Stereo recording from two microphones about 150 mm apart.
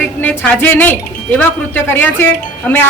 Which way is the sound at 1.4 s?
15° left (ahead or behind).